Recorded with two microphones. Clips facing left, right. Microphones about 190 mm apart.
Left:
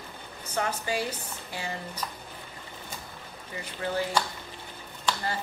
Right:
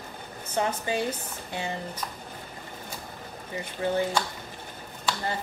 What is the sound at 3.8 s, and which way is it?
Speech, 25° right (ahead or behind).